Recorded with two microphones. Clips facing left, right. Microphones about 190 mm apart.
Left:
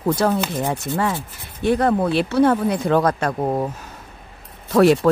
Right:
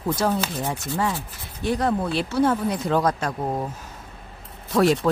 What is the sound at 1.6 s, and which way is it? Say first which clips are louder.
Speech: left 5 dB; 60° left (ahead or behind).